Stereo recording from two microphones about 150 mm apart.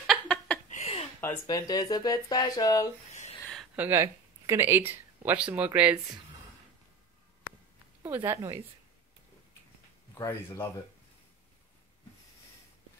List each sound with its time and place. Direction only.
0.0 s a sound: centre (ahead or behind)
1.2 s speech: 20° left (ahead or behind)
3.7 s speech: 15° right (ahead or behind)
8.2 s a woman's voice: 25° right (ahead or behind)
10.1 s speech: 20° left (ahead or behind)